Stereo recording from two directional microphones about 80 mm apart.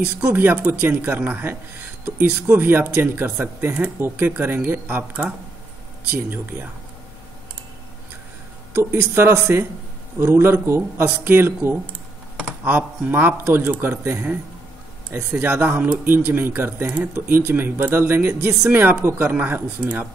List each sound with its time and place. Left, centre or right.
0.0 s speech: right
6.3 s speech: right
8.7 s speech: right